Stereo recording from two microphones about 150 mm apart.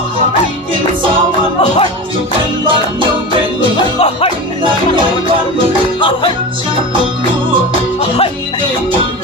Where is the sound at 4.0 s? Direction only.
40° left (ahead or behind).